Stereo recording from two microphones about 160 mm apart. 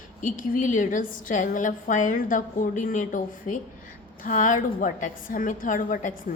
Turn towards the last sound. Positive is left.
turn(degrees=55)  # may be behind; listen again after turning